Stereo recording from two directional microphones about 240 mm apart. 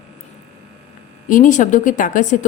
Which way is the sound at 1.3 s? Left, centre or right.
Left.